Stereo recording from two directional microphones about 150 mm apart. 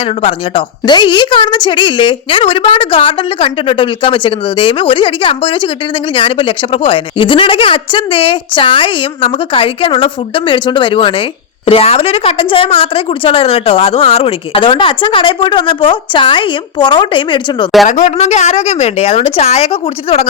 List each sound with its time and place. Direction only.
0.0 s a woman's voice: 35° left (ahead or behind)
17.8 s a woman's voice: 60° left (ahead or behind); by 20.2 s 40° left (ahead or behind)